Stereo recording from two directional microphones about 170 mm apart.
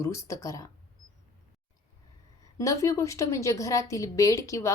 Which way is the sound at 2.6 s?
20° left (ahead or behind).